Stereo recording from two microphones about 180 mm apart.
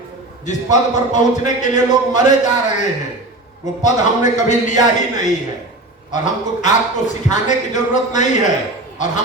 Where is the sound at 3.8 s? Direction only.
40° left (ahead or behind).